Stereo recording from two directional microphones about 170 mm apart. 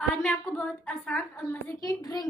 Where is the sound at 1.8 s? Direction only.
25° left (ahead or behind).